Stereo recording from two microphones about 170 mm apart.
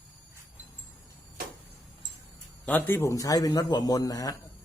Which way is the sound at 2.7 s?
10° left (ahead or behind).